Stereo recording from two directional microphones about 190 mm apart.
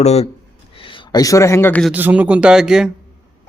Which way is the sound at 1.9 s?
10° right (ahead or behind).